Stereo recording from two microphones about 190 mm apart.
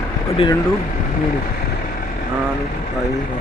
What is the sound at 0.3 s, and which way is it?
Speech, 30° left (ahead or behind).